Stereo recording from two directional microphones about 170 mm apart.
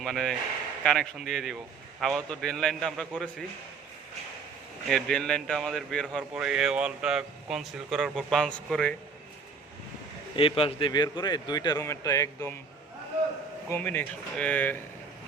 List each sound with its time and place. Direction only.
0.0 s speech: 5° left (ahead or behind)
4.9 s speech: 5° left (ahead or behind)
10.3 s a man's voice: 35° left (ahead or behind)
13.7 s speech: 10° left (ahead or behind)